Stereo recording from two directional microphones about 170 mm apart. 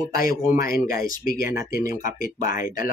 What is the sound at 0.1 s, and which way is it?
Speech, 60° left (ahead or behind).